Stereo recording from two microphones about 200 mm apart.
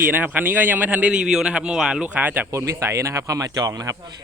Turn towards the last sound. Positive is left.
turn(degrees=-20)  # may be behind; listen again after turning